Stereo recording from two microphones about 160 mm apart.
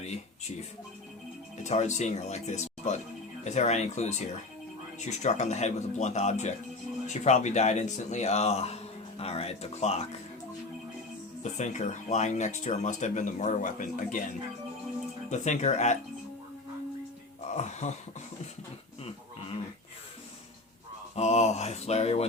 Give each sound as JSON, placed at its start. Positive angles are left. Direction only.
{"t": 0.0, "sound": "a sound", "side_deg": 45}
{"t": 1.6, "sound": "speech", "side_deg": 45}
{"t": 11.5, "sound": "speech", "side_deg": 45}
{"t": 15.3, "sound": "speech", "side_deg": 45}
{"t": 17.5, "sound": "speech", "side_deg": 45}
{"t": 21.2, "sound": "speech", "side_deg": 45}